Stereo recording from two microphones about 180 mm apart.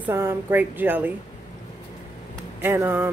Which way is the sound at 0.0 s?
15° right (ahead or behind).